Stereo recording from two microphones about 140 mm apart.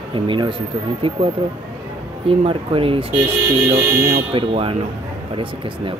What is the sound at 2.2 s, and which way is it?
Speech, 40° right (ahead or behind).